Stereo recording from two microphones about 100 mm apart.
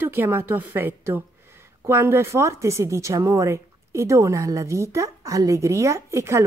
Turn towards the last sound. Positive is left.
turn(degrees=-30)  # may be behind; listen again after turning